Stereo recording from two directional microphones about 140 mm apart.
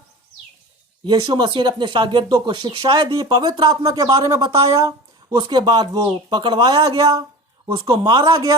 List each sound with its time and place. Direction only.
1.0 s speech: 30° right (ahead or behind)